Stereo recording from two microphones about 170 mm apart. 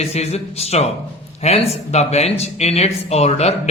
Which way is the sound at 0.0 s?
40° left (ahead or behind).